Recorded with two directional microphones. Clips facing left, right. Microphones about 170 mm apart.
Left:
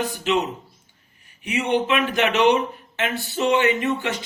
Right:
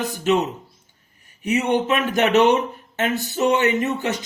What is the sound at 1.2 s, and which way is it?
Speech, 45° right (ahead or behind).